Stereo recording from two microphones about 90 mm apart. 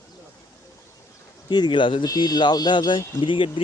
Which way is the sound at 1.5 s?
60° left (ahead or behind).